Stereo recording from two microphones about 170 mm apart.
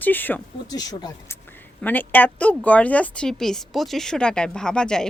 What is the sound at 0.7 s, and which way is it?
Speech, 25° left (ahead or behind).